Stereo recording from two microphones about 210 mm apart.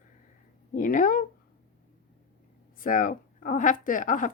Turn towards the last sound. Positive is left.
turn(degrees=40)  # may be behind; listen again after turning